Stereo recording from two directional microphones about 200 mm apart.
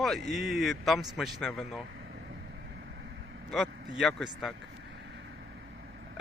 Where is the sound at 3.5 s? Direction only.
Centre (ahead or behind).